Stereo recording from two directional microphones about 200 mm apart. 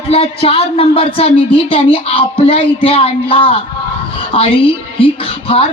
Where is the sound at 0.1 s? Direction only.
30° left (ahead or behind).